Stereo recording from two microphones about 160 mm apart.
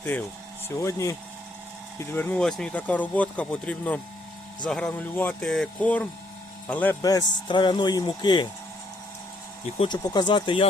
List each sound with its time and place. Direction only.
0.0 s speech: 10° left (ahead or behind)
2.1 s speech: 10° left (ahead or behind)
7.0 s speech: 25° left (ahead or behind)
9.7 s speech: 30° left (ahead or behind)